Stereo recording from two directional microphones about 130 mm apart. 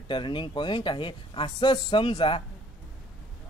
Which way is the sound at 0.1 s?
40° left (ahead or behind).